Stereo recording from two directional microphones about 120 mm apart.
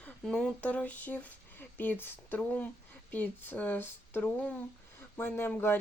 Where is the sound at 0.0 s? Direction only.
5° left (ahead or behind).